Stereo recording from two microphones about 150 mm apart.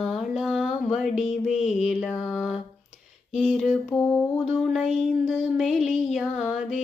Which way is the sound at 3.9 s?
30° left (ahead or behind).